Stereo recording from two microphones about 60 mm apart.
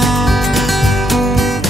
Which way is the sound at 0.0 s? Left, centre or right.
Centre.